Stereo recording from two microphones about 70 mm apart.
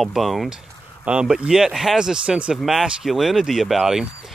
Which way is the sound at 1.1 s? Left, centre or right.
Centre.